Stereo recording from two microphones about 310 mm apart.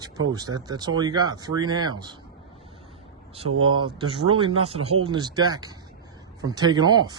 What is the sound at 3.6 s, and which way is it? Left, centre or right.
Speech, centre.